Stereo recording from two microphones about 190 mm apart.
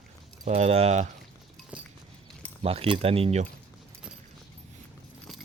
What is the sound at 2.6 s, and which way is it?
Speech, 30° right (ahead or behind).